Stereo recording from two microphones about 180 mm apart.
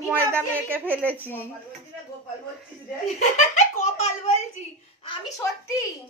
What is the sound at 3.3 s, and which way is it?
Giggle, 40° left (ahead or behind).